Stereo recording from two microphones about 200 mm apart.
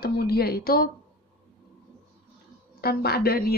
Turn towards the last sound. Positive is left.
turn(degrees=50)  # may be behind; listen again after turning